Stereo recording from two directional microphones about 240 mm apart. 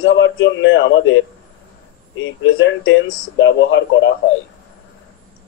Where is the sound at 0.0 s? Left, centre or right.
Left.